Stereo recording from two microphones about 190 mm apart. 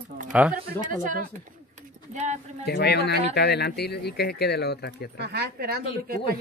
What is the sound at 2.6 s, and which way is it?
Speech, 60° left (ahead or behind).